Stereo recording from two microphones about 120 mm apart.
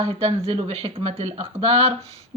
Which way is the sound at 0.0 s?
55° right (ahead or behind).